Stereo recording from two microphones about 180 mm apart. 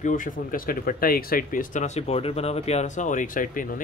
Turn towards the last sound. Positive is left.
turn(degrees=50)  # may be behind; listen again after turning